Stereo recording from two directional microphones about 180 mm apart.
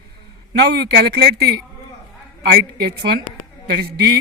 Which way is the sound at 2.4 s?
60° right (ahead or behind).